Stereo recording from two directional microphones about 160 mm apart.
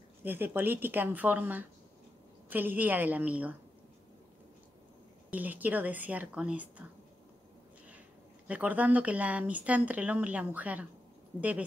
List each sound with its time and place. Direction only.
0.2 s speech: 10° right (ahead or behind)
5.3 s speech: 10° right (ahead or behind)
8.5 s speech: 10° right (ahead or behind)